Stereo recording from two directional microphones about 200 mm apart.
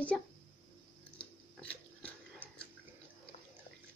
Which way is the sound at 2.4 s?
10° right (ahead or behind).